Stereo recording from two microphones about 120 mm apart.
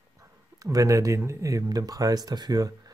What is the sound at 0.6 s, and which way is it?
Speech, 30° right (ahead or behind).